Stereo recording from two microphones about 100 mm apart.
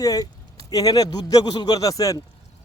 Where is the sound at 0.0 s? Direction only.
35° left (ahead or behind).